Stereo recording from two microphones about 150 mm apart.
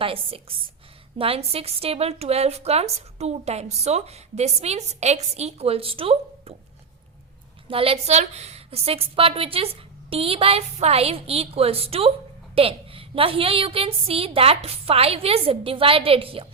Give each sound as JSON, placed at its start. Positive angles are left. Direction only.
{"t": 0.0, "sound": "a woman's voice", "side_deg": -40}
{"t": 7.7, "sound": "a woman's voice", "side_deg": -40}